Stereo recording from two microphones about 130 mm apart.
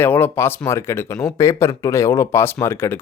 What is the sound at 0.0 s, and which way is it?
Speech, 15° left (ahead or behind).